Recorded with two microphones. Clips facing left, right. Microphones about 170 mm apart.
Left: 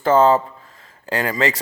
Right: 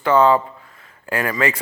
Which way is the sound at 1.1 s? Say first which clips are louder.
Even; 25° left (ahead or behind).